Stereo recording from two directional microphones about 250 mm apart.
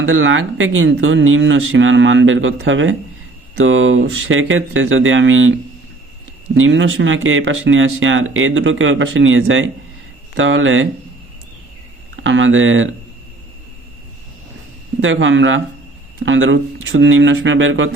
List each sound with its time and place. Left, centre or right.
0.0 s speech: right
12.2 s speech: right
15.0 s speech: right